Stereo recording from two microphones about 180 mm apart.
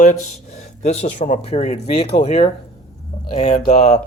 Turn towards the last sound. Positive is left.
turn(degrees=40)  # may be behind; listen again after turning